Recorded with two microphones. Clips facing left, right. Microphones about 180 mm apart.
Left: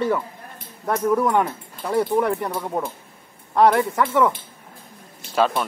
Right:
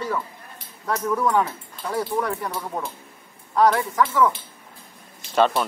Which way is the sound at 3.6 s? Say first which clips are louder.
Left 2 dB; 55° left (ahead or behind).